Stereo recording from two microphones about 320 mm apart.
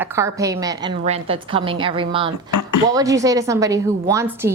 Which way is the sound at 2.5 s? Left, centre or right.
Left.